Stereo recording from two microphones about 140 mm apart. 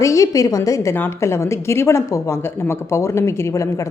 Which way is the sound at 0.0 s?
25° left (ahead or behind).